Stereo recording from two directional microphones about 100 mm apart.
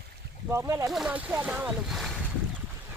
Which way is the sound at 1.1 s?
15° right (ahead or behind).